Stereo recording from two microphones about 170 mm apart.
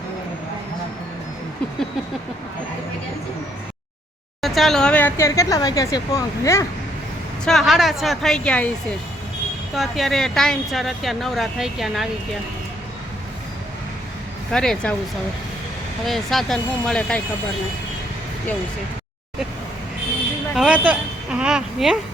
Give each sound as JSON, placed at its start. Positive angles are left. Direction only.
{"t": 4.4, "sound": "speech", "side_deg": 0}
{"t": 7.4, "sound": "speech", "side_deg": 0}
{"t": 14.5, "sound": "speech", "side_deg": 5}
{"t": 16.0, "sound": "speech", "side_deg": 0}
{"t": 20.6, "sound": "speech", "side_deg": -5}